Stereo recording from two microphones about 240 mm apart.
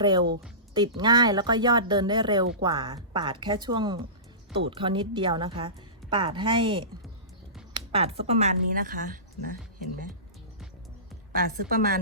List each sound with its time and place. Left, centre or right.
0.0 s a woman's voice: centre; by 9.6 s right
11.3 s a woman's voice: right